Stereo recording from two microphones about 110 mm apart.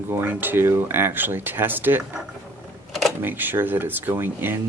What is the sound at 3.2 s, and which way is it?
Speech, 20° right (ahead or behind).